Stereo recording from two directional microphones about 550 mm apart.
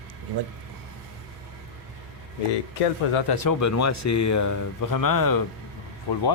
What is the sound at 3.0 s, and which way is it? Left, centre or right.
Speech, left.